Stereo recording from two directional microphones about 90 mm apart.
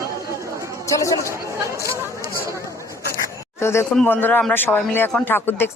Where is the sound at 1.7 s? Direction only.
35° left (ahead or behind).